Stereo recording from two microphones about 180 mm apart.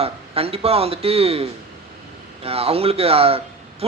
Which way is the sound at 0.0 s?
35° right (ahead or behind).